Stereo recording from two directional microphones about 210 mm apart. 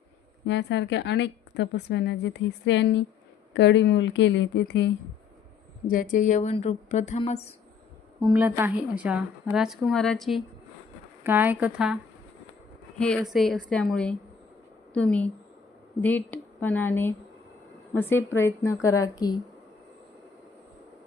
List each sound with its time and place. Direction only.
0.4 s a woman's voice: 55° left (ahead or behind)
5.9 s speech: 40° left (ahead or behind)
8.2 s a woman's voice: 10° right (ahead or behind)
13.0 s a woman's voice: centre (ahead or behind); by 19.4 s 20° left (ahead or behind)